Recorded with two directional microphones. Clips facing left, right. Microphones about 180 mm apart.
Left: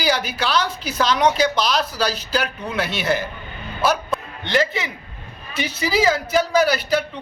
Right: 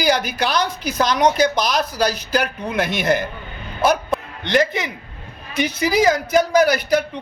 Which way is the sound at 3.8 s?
20° right (ahead or behind).